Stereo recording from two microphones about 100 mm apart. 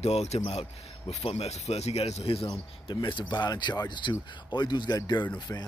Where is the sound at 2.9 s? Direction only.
50° left (ahead or behind).